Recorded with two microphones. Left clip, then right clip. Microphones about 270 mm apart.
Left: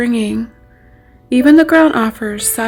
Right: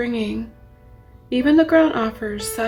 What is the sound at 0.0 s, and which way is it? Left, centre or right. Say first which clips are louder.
Speech: left 7 dB; left.